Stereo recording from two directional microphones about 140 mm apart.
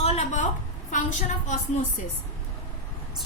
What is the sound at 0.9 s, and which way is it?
Speech, 65° left (ahead or behind).